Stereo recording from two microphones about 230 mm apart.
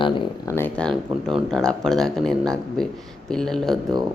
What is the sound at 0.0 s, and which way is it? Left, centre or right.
Speech, left.